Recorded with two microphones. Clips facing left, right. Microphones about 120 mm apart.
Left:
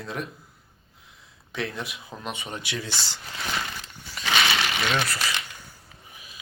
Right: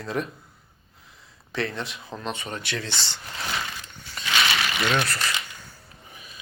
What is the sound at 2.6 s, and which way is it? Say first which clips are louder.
Speech: right 1 dB; 65° right (ahead or behind).